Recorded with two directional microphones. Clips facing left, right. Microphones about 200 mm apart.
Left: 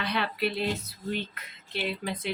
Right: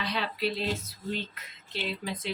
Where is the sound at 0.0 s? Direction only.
60° left (ahead or behind).